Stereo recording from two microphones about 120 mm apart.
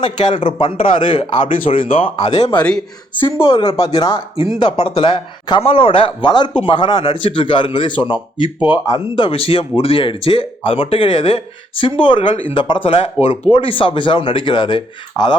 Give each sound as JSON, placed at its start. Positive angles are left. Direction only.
{"t": 0.3, "sound": "speech", "side_deg": 45}
{"t": 1.6, "sound": "speech", "side_deg": 90}
{"t": 2.0, "sound": "speech", "side_deg": 60}
{"t": 2.6, "sound": "speech", "side_deg": 10}
{"t": 3.2, "sound": "speech", "side_deg": 45}